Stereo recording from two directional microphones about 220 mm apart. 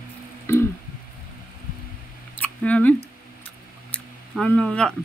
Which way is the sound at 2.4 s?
5° left (ahead or behind).